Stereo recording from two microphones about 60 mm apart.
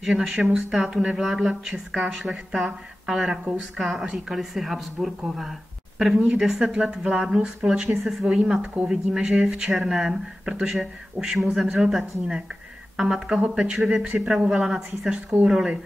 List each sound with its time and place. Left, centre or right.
0.0 s speech: centre
8.8 s speech: centre
14.5 s speech: centre